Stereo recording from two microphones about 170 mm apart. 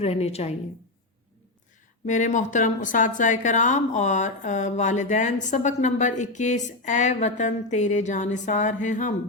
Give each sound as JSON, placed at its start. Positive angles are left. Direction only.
{"t": 0.0, "sound": "a woman's voice", "side_deg": 35}
{"t": 2.0, "sound": "a woman's voice", "side_deg": 45}